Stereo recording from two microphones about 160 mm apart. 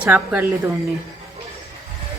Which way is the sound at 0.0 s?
5° right (ahead or behind).